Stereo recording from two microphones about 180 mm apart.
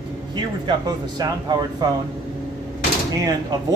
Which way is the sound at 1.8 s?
20° right (ahead or behind).